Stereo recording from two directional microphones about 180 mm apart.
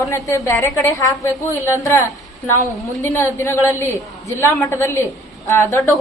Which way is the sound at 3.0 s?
15° left (ahead or behind).